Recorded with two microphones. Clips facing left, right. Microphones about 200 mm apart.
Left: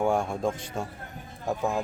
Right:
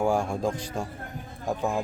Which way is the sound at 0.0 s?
Centre (ahead or behind).